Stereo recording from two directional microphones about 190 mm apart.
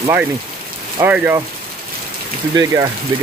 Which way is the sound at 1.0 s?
10° right (ahead or behind).